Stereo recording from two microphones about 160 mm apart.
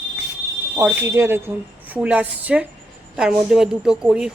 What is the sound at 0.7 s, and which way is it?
Speech, 15° right (ahead or behind).